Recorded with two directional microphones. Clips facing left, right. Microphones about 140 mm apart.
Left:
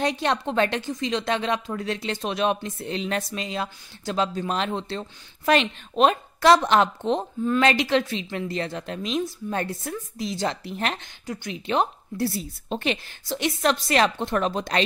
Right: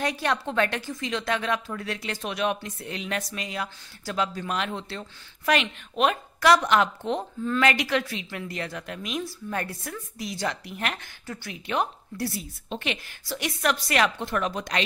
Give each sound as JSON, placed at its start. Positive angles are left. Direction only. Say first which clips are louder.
{"t": 0.0, "sound": "a woman's voice", "louder": "left 3 dB", "side_deg": 25}
{"t": 13.2, "sound": "a woman's voice", "louder": "left 4 dB", "side_deg": 25}